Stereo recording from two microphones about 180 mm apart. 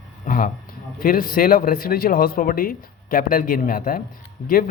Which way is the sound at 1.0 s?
50° left (ahead or behind).